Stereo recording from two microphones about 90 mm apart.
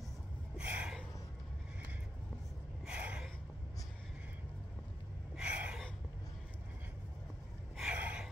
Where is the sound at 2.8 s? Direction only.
10° right (ahead or behind).